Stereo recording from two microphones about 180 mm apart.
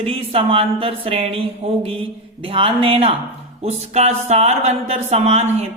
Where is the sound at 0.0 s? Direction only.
30° right (ahead or behind).